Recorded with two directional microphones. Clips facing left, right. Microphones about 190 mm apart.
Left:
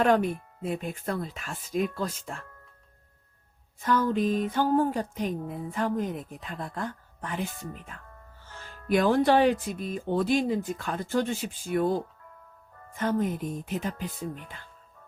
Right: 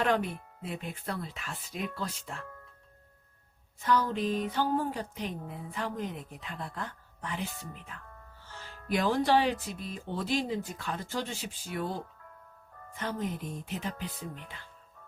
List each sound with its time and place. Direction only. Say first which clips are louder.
0.6 s speech: left 6 dB; 45° left (ahead or behind)
3.8 s speech: left 4 dB; 50° left (ahead or behind)
8.9 s speech: left 5 dB; 55° left (ahead or behind)
13.0 s speech: left 7 dB; 50° left (ahead or behind)